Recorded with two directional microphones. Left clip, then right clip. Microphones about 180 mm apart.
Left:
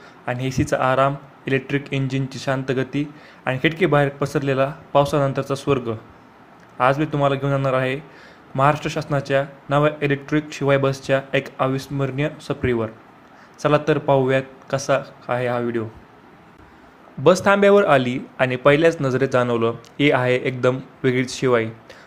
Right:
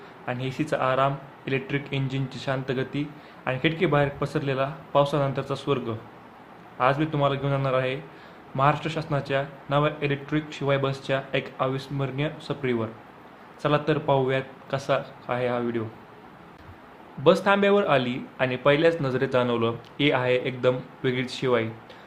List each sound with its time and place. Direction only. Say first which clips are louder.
0.3 s speech: left 5 dB; 25° left (ahead or behind)
17.2 s speech: left 5 dB; 30° left (ahead or behind)